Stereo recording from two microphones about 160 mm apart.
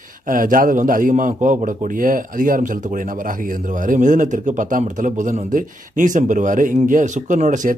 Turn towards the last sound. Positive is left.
turn(degrees=-50)  # may be behind; listen again after turning